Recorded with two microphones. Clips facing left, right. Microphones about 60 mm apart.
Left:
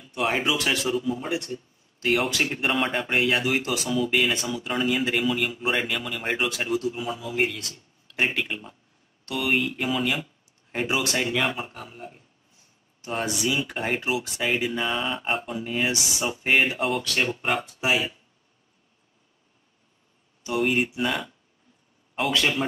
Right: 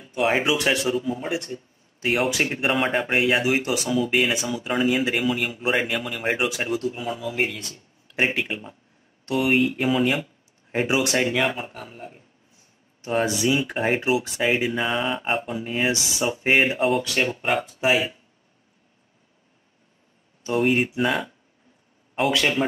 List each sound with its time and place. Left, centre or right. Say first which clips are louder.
0.3 s speech: right 3 dB; centre
9.2 s speech: right 6 dB; right
9.5 s speech: right 3 dB; centre
10.0 s a sound: right 4 dB; centre
11.2 s speech: right 2 dB; centre
13.2 s speech: right 4 dB; right
13.6 s speech: right 4 dB; centre
20.5 s speech: right 3 dB; centre